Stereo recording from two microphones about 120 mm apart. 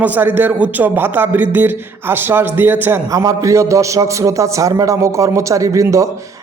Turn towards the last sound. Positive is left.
turn(degrees=-25)  # may be behind; listen again after turning